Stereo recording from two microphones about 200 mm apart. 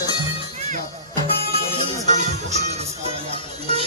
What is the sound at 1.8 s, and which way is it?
Music, 35° right (ahead or behind).